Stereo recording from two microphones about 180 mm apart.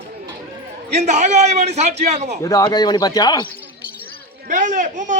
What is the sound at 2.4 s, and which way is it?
Speech, 20° left (ahead or behind).